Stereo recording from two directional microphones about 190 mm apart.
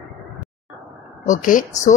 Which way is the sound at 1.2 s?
45° left (ahead or behind).